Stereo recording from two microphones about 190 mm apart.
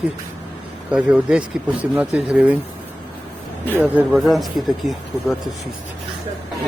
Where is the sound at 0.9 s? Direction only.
5° right (ahead or behind).